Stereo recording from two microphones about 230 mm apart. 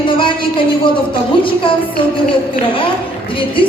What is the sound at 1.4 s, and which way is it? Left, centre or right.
Speech, left.